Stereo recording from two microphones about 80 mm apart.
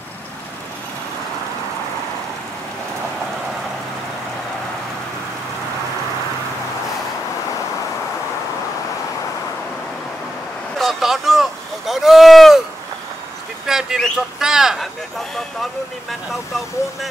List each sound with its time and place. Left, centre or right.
10.8 s boat: centre
13.7 s a sound: centre
14.4 s speech: centre